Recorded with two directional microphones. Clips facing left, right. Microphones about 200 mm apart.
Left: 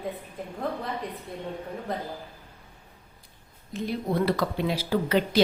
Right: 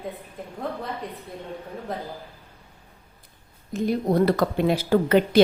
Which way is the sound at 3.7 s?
45° right (ahead or behind).